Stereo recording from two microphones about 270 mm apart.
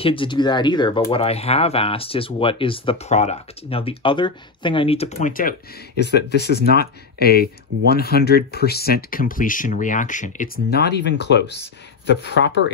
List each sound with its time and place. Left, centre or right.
0.0 s speech: centre; by 12.7 s left